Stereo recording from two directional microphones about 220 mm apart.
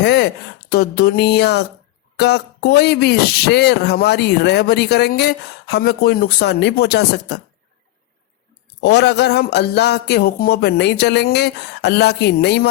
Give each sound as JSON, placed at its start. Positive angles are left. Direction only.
{"t": 0.0, "sound": "speech", "side_deg": 50}
{"t": 8.8, "sound": "speech", "side_deg": 50}